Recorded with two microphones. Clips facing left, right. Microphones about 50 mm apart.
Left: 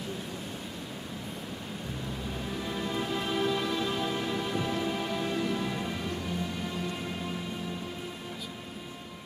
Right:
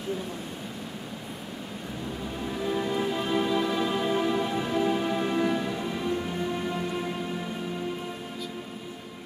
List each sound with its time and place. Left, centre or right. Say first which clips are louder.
2.7 s music: right 5 dB; centre